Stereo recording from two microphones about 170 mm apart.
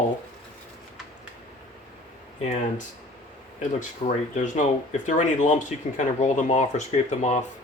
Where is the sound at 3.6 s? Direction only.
50° left (ahead or behind).